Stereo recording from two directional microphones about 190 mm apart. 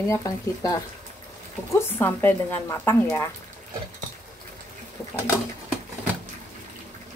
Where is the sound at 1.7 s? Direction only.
10° left (ahead or behind).